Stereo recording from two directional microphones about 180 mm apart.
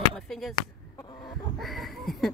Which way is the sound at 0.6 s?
25° left (ahead or behind).